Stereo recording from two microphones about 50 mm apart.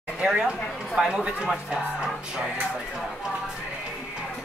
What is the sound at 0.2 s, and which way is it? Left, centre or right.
Speech, centre.